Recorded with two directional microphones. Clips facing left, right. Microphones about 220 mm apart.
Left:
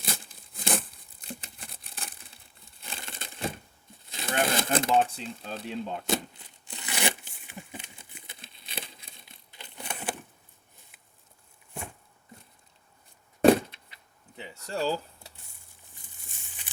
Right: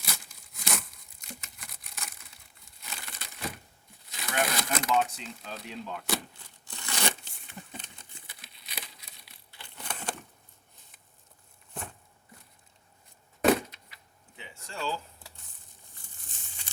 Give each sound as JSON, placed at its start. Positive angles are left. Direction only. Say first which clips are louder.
{"t": 0.0, "sound": "tearing", "louder": "left 5 dB", "side_deg": 30}
{"t": 4.1, "sound": "speech", "louder": "left 3 dB", "side_deg": 30}
{"t": 6.4, "sound": "crumpling", "louder": "left 2 dB", "side_deg": 15}
{"t": 8.3, "sound": "crumpling", "louder": "left 4 dB", "side_deg": 25}
{"t": 13.4, "sound": "a sound", "louder": "left 5 dB", "side_deg": 30}